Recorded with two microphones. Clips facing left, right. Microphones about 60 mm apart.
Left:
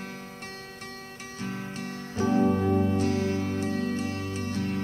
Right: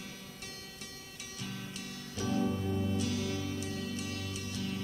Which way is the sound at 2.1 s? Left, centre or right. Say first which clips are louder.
Left 9 dB; left.